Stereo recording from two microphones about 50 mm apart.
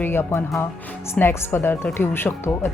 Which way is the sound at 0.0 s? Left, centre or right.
Left.